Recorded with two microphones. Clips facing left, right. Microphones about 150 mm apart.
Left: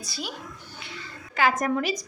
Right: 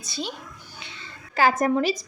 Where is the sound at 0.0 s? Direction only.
25° right (ahead or behind).